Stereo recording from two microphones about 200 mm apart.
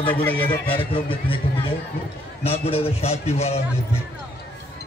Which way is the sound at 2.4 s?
30° left (ahead or behind).